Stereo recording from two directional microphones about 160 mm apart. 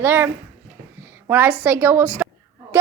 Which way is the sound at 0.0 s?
15° right (ahead or behind).